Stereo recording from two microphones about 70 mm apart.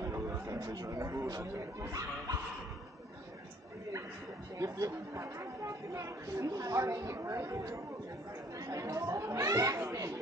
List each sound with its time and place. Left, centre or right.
0.0 s a sound: right
0.6 s speech: right
0.8 s speech: right
4.6 s speech: right